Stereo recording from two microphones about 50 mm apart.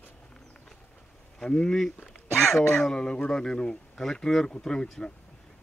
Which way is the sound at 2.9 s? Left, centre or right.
Centre.